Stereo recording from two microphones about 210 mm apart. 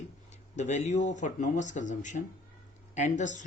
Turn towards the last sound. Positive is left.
turn(degrees=35)  # may be behind; listen again after turning